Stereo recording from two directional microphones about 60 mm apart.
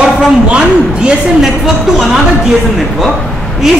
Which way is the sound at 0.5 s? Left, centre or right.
Centre.